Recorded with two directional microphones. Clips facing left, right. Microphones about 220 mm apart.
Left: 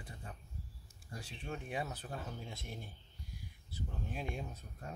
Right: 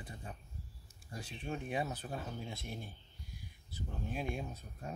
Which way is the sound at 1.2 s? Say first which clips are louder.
Right 3 dB; 20° right (ahead or behind).